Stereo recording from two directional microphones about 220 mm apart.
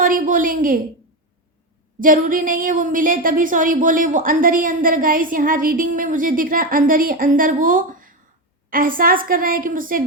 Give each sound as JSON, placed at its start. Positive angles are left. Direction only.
{"t": 0.0, "sound": "a woman's voice", "side_deg": -40}
{"t": 2.0, "sound": "a woman's voice", "side_deg": -35}